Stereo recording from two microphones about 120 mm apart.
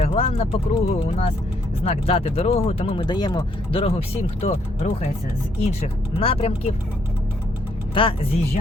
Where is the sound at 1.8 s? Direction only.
60° left (ahead or behind).